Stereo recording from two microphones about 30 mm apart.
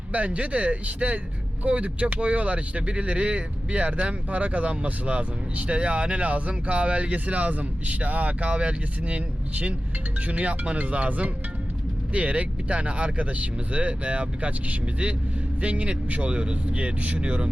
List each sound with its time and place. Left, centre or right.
0.1 s speech: right
16.3 s speech: right